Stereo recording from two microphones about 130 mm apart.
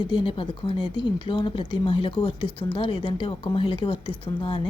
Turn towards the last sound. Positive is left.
turn(degrees=40)  # may be behind; listen again after turning